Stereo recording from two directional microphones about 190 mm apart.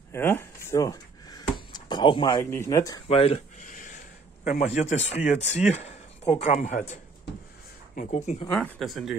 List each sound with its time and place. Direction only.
0.1 s a sound: 10° left (ahead or behind)
2.5 s speech: 15° left (ahead or behind)
3.1 s a sound: 30° left (ahead or behind)
4.5 s speech: 40° left (ahead or behind)
7.9 s speech: 40° left (ahead or behind)
8.5 s speech: centre (ahead or behind)